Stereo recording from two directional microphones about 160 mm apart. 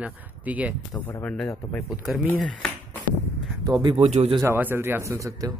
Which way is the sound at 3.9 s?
40° right (ahead or behind).